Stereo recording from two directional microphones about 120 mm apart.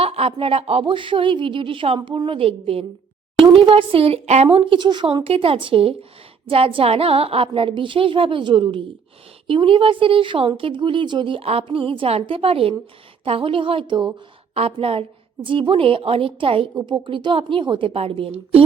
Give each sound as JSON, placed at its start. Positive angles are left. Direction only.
{"t": 0.0, "sound": "speech", "side_deg": -55}
{"t": 4.5, "sound": "speech", "side_deg": -45}
{"t": 14.5, "sound": "speech", "side_deg": -55}